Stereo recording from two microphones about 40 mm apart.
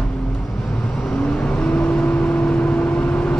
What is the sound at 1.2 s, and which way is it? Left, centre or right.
Vehicle, left.